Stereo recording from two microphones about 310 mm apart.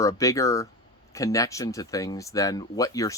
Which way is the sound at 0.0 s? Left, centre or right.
Centre.